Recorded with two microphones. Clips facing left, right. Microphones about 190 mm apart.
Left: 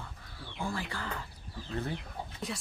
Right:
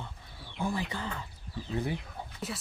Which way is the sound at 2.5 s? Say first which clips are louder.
Even; 5° right (ahead or behind).